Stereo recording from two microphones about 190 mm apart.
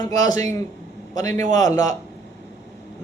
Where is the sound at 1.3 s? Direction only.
40° right (ahead or behind).